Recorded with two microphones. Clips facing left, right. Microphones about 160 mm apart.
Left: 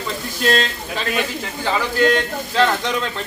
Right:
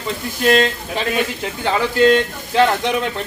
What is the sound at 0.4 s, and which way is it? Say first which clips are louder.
Speech: right 4 dB; 15° right (ahead or behind).